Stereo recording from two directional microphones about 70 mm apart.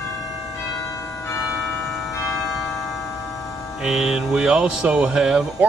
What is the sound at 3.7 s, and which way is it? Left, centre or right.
Speech, centre.